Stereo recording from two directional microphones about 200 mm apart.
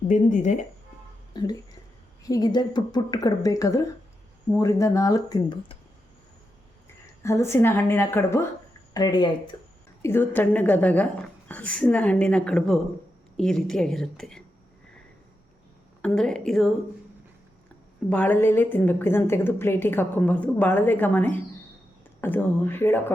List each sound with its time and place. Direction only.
0.1 s speech: 40° left (ahead or behind)
1.3 s a woman's voice: 20° left (ahead or behind)
7.2 s a woman's voice: 15° left (ahead or behind)
16.0 s a woman's voice: 5° left (ahead or behind)
18.1 s a woman's voice: 10° left (ahead or behind)